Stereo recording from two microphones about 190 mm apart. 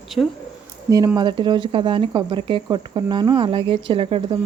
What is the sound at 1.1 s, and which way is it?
Speech, 25° right (ahead or behind).